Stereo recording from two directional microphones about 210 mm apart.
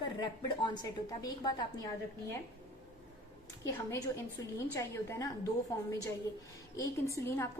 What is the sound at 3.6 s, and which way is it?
A woman's voice, 15° left (ahead or behind).